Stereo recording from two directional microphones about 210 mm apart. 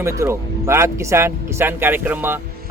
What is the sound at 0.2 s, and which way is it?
Speech, 15° right (ahead or behind).